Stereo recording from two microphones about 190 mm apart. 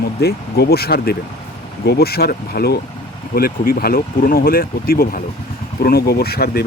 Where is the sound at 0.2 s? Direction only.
55° left (ahead or behind).